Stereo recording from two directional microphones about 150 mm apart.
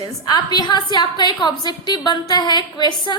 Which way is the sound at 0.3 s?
25° left (ahead or behind).